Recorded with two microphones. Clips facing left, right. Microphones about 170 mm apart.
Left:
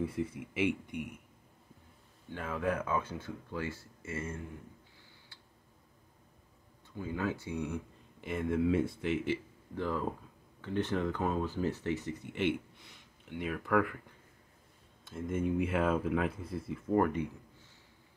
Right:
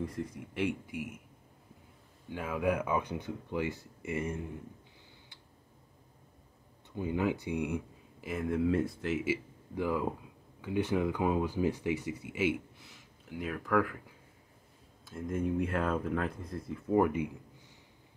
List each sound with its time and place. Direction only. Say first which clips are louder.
0.0 s speech: left 2 dB; 5° left (ahead or behind)
2.2 s speech: right 3 dB; 10° right (ahead or behind)
7.0 s speech: right 4 dB; 20° right (ahead or behind)
8.2 s speech: even; centre (ahead or behind)